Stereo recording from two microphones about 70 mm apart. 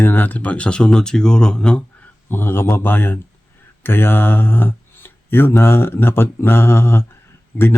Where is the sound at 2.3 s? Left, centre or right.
Left.